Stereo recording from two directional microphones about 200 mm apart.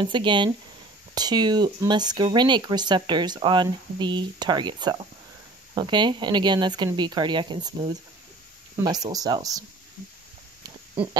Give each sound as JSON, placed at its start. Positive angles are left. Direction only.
{"t": 0.0, "sound": "speech", "side_deg": -25}